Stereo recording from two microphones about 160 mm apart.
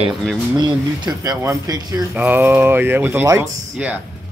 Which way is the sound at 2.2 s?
10° right (ahead or behind).